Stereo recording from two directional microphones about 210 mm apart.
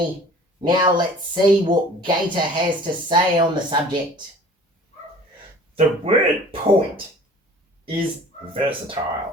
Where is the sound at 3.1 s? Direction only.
20° right (ahead or behind).